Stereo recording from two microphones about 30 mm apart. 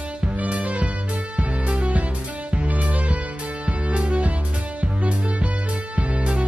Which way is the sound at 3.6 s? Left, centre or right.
Right.